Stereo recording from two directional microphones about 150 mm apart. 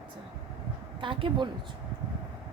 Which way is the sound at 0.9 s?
35° right (ahead or behind).